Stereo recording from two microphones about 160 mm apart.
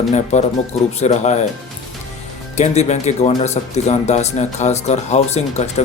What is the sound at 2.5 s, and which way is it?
Speech, 45° left (ahead or behind).